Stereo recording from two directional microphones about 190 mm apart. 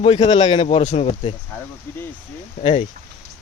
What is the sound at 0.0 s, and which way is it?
Speech, 30° left (ahead or behind).